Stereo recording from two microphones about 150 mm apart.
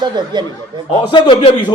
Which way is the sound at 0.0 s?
30° right (ahead or behind).